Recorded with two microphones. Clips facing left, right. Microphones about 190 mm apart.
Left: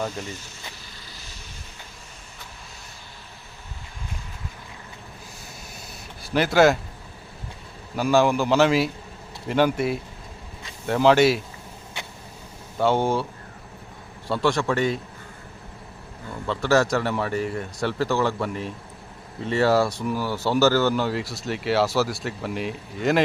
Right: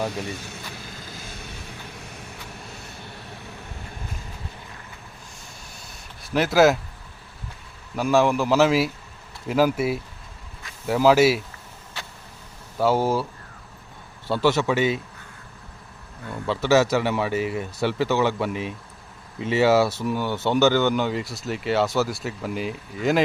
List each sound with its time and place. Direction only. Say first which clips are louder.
0.3 s vehicle: right 4 dB; 60° right (ahead or behind)
6.2 s speech: even; centre (ahead or behind)
7.9 s speech: even; centre (ahead or behind)
12.8 s speech: even; 5° right (ahead or behind)
14.3 s speech: right 2 dB; 5° right (ahead or behind)
16.5 s speech: right 2 dB; centre (ahead or behind)